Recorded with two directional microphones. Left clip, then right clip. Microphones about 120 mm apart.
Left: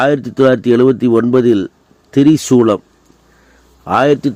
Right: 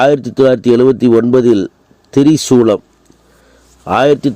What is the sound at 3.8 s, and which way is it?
Speech, 30° right (ahead or behind).